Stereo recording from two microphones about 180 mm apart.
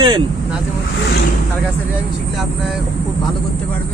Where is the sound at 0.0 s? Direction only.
25° right (ahead or behind).